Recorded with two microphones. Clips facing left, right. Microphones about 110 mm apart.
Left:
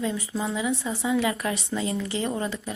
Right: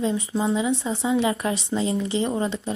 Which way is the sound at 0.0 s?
25° right (ahead or behind).